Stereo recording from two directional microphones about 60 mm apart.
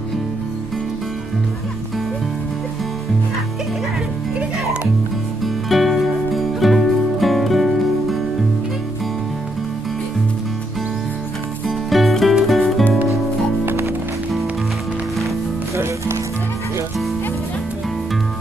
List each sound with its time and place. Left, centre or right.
5.4 s music: centre
11.9 s music: centre
13.7 s music: right
15.7 s music: right